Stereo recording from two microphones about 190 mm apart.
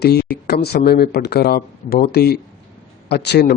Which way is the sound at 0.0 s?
60° left (ahead or behind).